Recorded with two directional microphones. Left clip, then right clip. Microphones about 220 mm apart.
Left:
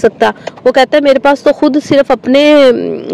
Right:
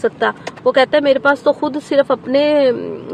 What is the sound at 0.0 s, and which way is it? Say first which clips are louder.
Speech: left 7 dB; 30° left (ahead or behind).